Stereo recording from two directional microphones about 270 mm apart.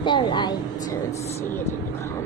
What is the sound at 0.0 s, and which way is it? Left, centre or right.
Speech, centre.